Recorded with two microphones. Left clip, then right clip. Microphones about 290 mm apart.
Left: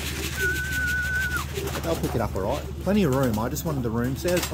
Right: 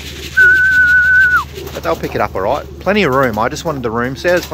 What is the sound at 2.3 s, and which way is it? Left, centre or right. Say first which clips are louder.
Speech: right 12 dB; centre.